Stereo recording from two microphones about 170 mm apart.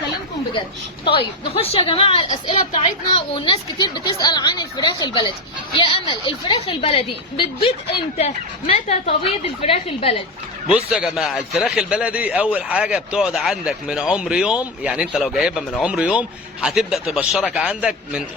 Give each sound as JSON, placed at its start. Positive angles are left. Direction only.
{"t": 1.1, "sound": "a woman's voice", "side_deg": 35}
{"t": 10.8, "sound": "speech", "side_deg": -5}